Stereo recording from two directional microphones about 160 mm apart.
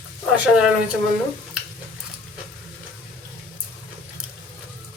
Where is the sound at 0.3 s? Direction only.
5° right (ahead or behind).